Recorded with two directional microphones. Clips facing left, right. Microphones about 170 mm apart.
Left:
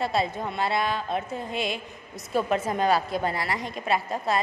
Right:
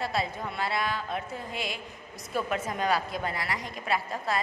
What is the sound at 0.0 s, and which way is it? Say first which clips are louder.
A woman's voice: left 5 dB; 25° left (ahead or behind).